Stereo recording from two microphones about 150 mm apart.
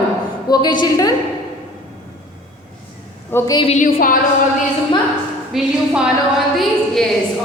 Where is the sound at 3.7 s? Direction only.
65° left (ahead or behind).